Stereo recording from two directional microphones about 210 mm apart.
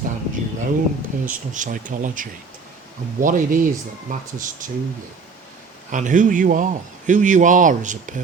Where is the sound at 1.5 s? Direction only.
35° right (ahead or behind).